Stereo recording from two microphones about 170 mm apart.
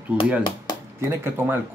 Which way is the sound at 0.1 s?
10° right (ahead or behind).